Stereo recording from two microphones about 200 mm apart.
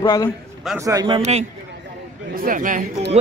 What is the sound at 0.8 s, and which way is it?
Speech, 15° right (ahead or behind).